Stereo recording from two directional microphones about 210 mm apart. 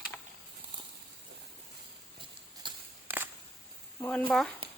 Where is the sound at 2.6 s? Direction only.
20° right (ahead or behind).